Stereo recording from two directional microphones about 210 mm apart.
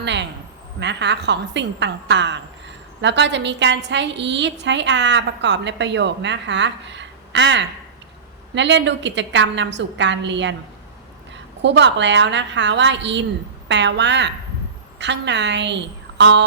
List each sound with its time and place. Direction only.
0.0 s a sound: 55° right (ahead or behind)
0.8 s a woman's voice: 55° right (ahead or behind)
11.6 s a woman's voice: 55° right (ahead or behind)